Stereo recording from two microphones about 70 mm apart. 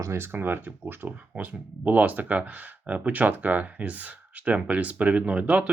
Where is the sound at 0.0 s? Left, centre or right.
Right.